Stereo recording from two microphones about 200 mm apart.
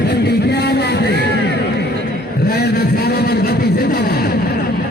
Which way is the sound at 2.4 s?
55° left (ahead or behind).